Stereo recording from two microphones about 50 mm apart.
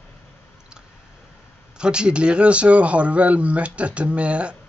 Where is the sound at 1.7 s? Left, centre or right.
Centre.